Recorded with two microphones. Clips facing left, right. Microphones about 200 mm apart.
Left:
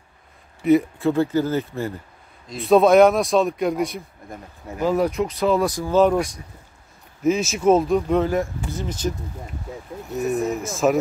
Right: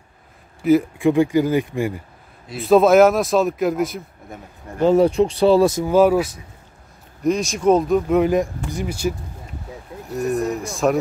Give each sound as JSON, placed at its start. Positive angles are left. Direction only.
{"t": 0.6, "sound": "speech", "side_deg": 0}
{"t": 0.9, "sound": "speech", "side_deg": -15}
{"t": 2.4, "sound": "speech", "side_deg": 0}
{"t": 4.8, "sound": "speech", "side_deg": -25}
{"t": 5.9, "sound": "speech", "side_deg": -10}
{"t": 8.2, "sound": "speech", "side_deg": -15}
{"t": 10.0, "sound": "speech", "side_deg": 0}